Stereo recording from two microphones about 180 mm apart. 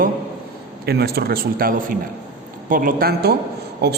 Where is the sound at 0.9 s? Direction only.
60° right (ahead or behind).